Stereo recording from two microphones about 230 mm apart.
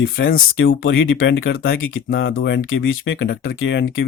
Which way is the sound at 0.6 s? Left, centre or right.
Left.